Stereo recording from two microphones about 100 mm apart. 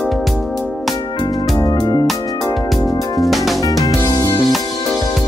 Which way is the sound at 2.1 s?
35° left (ahead or behind).